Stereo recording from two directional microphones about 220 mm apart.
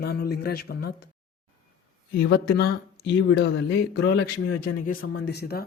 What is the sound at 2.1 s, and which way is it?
Speech, 45° left (ahead or behind).